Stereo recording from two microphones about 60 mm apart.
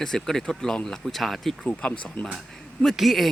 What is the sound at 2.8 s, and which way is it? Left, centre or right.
Speech, centre.